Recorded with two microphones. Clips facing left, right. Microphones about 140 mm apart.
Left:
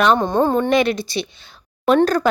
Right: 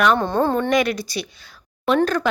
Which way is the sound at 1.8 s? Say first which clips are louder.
Left 4 dB; 40° left (ahead or behind).